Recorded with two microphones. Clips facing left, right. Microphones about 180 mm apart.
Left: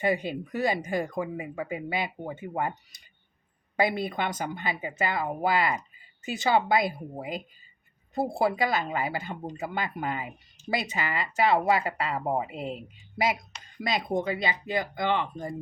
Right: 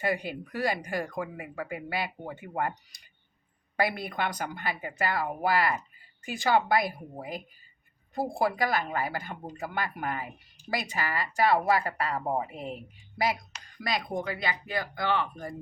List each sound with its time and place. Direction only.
0.0 s speech: 20° left (ahead or behind)